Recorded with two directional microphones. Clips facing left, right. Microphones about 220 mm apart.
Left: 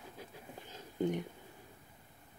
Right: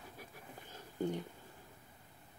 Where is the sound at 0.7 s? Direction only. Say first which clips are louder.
Left 3 dB; 20° left (ahead or behind).